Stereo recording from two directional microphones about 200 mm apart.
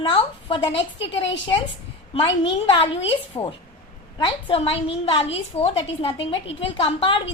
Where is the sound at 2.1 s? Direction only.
25° left (ahead or behind).